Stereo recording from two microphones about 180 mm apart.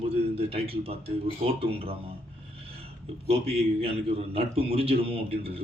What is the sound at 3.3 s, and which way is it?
A man's voice, 35° right (ahead or behind).